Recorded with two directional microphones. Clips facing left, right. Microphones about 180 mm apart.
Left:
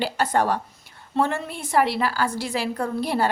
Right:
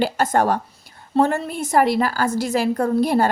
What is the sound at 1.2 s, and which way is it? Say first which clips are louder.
A woman's voice: right 5 dB; 40° right (ahead or behind).